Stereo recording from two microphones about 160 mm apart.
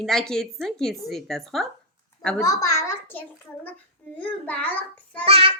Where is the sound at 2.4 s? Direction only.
20° left (ahead or behind).